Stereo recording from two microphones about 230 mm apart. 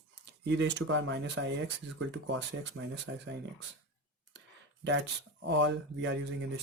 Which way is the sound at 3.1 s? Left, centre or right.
Right.